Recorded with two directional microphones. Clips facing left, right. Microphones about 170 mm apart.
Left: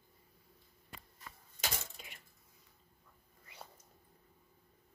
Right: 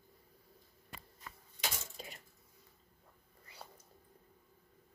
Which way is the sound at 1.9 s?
35° right (ahead or behind).